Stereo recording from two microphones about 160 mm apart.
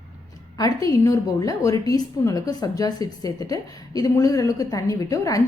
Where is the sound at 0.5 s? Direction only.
20° left (ahead or behind).